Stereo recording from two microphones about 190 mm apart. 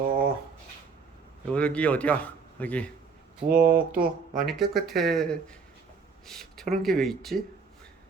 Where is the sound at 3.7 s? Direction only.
50° right (ahead or behind).